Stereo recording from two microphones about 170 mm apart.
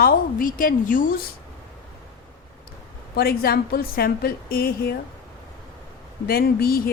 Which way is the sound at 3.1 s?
65° left (ahead or behind).